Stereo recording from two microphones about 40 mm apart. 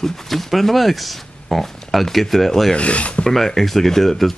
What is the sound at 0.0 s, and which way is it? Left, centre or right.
Speech, centre.